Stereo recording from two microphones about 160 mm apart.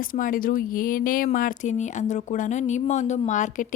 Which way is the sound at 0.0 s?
60° left (ahead or behind).